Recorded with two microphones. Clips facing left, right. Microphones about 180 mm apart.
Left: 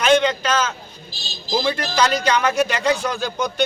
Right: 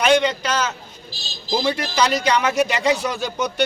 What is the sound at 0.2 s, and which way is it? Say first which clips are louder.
Speech: left 1 dB; 10° right (ahead or behind).